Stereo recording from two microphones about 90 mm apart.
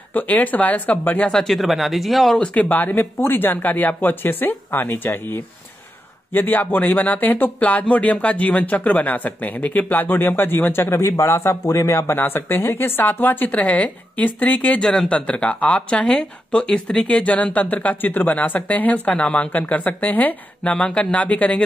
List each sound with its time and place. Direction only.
0.1 s speech: 20° left (ahead or behind)
1.3 s speech: 5° left (ahead or behind)